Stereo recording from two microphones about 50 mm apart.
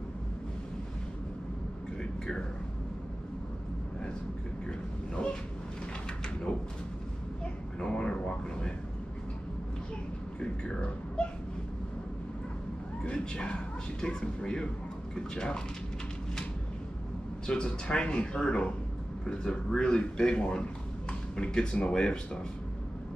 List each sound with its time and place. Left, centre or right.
5.1 s vehicle: centre
7.8 s a sound: centre
10.4 s music: left
13.0 s a sound: centre
14.0 s a man's voice: centre
17.5 s a man's voice: centre